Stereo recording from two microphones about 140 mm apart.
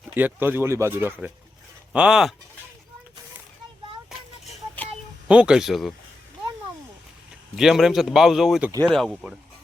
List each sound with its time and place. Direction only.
0.1 s speech: 15° right (ahead or behind)
1.9 s speech: 5° right (ahead or behind)
5.3 s a man's voice: 5° right (ahead or behind)
7.5 s a man's voice: centre (ahead or behind)